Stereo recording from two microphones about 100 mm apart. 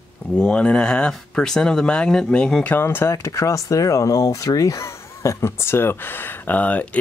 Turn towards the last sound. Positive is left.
turn(degrees=15)  # may be behind; listen again after turning